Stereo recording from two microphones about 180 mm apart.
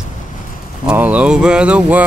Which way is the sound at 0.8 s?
10° right (ahead or behind).